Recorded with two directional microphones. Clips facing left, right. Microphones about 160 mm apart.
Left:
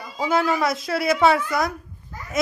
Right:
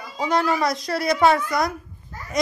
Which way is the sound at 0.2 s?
5° left (ahead or behind).